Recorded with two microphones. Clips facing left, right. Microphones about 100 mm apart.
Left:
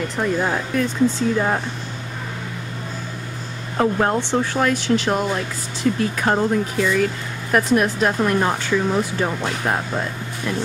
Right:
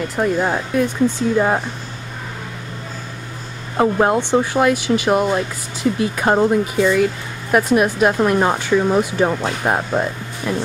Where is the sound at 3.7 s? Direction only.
15° right (ahead or behind).